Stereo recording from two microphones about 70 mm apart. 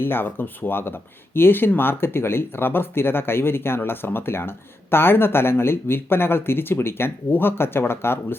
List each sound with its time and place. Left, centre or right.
0.0 s speech: left